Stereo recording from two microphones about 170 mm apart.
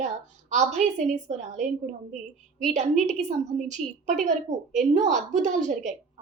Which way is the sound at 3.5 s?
5° left (ahead or behind).